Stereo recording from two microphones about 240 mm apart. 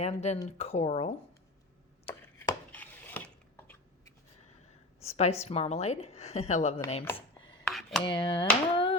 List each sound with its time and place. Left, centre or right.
0.0 s a woman's voice: left
2.0 s chopping: centre
4.9 s a woman's voice: left
7.0 s a sound: centre
7.7 s a sound: centre
8.0 s a woman's voice: centre